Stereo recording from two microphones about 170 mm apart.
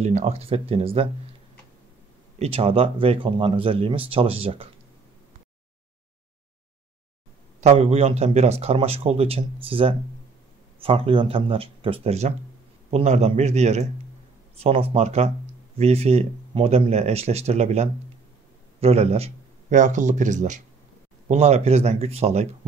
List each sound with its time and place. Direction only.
0.0 s speech: 45° right (ahead or behind)
2.3 s speech: 35° right (ahead or behind)
7.6 s speech: 40° right (ahead or behind)